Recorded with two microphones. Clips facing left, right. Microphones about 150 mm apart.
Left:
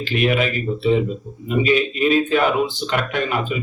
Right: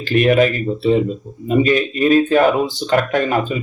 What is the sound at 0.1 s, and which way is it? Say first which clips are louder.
Speech: right 7 dB; 45° right (ahead or behind).